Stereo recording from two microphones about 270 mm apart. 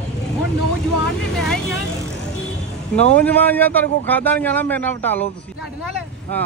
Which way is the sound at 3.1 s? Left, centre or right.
Centre.